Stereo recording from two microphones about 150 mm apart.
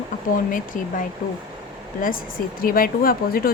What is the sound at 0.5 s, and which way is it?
Speech, 65° left (ahead or behind).